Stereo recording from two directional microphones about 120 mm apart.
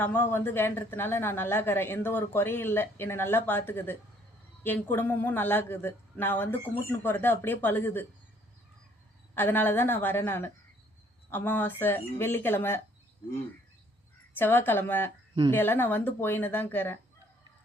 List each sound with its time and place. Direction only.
0.0 s a woman's voice: 20° left (ahead or behind)
9.3 s speech: 15° left (ahead or behind)
14.3 s speech: 15° left (ahead or behind)